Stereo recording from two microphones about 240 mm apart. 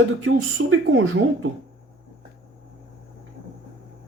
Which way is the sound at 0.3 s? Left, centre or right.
Right.